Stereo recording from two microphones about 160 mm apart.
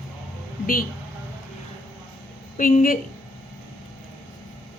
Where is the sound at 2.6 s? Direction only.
60° left (ahead or behind).